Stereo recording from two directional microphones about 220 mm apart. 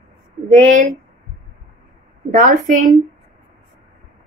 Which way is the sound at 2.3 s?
40° right (ahead or behind).